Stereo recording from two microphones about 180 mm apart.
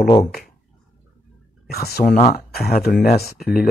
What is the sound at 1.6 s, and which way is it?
Speech, 60° left (ahead or behind).